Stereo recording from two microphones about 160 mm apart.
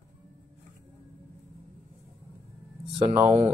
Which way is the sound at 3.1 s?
15° right (ahead or behind).